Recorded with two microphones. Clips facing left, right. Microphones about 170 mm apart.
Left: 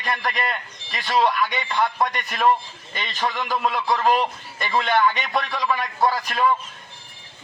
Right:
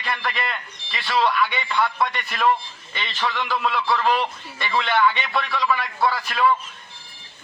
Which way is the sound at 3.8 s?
20° left (ahead or behind).